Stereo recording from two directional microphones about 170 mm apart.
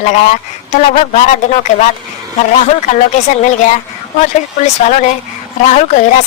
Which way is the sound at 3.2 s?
45° left (ahead or behind).